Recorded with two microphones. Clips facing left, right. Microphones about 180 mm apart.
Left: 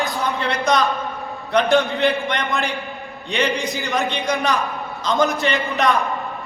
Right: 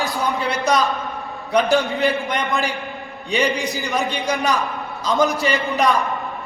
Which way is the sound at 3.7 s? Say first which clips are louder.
Even; centre (ahead or behind).